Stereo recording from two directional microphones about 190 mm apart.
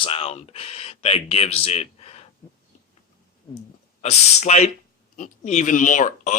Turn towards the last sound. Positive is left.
turn(degrees=40)  # may be behind; listen again after turning